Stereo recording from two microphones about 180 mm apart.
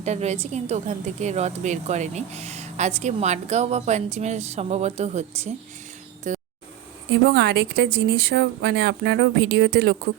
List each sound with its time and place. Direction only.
0.0 s a woman's voice: 40° right (ahead or behind)
7.3 s speech: 70° right (ahead or behind)